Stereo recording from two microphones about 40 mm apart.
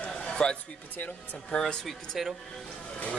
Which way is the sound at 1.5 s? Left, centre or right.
Left.